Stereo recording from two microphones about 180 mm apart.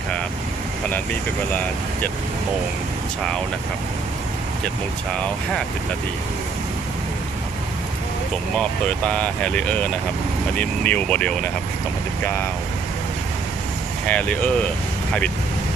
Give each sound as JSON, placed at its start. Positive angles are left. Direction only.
{"t": 8.5, "sound": "speech", "side_deg": 5}
{"t": 14.0, "sound": "speech", "side_deg": 5}